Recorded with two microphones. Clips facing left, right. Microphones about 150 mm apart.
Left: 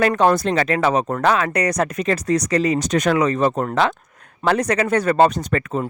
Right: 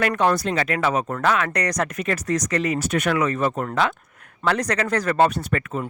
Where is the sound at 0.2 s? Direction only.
45° left (ahead or behind).